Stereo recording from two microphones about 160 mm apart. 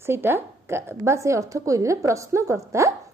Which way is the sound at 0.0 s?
15° right (ahead or behind).